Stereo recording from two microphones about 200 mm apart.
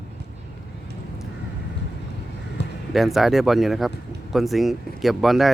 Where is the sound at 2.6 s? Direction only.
60° left (ahead or behind).